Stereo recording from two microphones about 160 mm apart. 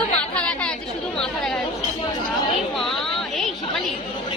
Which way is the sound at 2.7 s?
Centre (ahead or behind).